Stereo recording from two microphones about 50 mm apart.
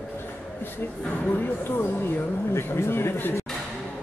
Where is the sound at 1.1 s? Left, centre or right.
Left.